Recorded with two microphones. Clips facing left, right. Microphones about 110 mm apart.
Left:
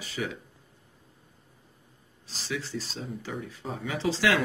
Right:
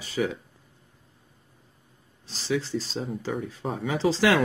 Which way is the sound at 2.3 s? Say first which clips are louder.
Right 7 dB; 30° right (ahead or behind).